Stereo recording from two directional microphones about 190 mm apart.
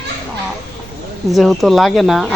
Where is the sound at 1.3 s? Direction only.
Centre (ahead or behind).